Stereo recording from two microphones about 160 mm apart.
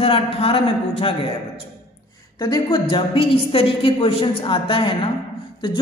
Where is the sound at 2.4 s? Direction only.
25° left (ahead or behind).